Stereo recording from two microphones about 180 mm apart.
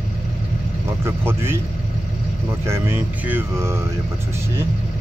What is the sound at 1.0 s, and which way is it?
Speech, 15° right (ahead or behind).